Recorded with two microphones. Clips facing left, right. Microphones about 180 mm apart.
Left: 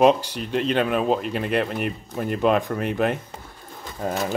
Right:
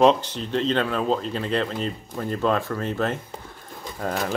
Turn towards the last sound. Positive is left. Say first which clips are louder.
# left 1 dB
turn(degrees=10)  # may be behind; listen again after turning